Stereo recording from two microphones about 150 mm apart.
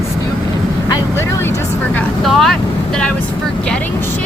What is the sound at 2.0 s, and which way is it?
Vehicle, centre (ahead or behind).